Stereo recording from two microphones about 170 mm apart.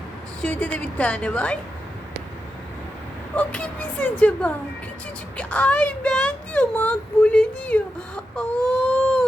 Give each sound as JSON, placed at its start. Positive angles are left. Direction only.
{"t": 0.4, "sound": "speech", "side_deg": 5}
{"t": 3.3, "sound": "speech", "side_deg": 10}
{"t": 8.8, "sound": "a sound", "side_deg": 10}